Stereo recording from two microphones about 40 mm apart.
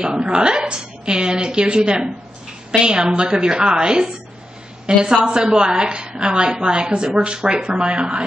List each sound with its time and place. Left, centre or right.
0.0 s a woman's voice: right